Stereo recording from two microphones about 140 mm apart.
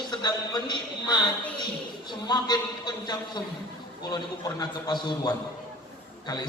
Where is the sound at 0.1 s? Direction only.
30° left (ahead or behind).